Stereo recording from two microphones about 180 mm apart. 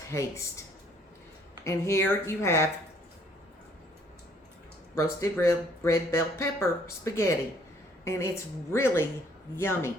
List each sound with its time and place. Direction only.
0.1 s speech: 15° left (ahead or behind)
1.6 s speech: 15° left (ahead or behind)
5.2 s a woman's voice: 15° left (ahead or behind)